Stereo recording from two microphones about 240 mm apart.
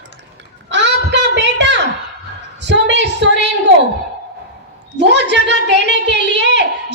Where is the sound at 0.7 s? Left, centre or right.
Right.